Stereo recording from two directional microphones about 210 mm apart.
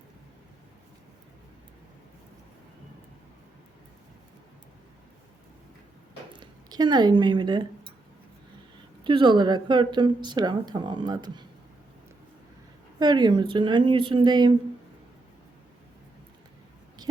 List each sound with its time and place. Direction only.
6.3 s speech: 20° right (ahead or behind)
9.0 s a woman's voice: 25° right (ahead or behind)
13.0 s a woman's voice: 20° right (ahead or behind)